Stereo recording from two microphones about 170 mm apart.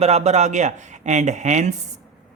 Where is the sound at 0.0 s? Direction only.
40° right (ahead or behind).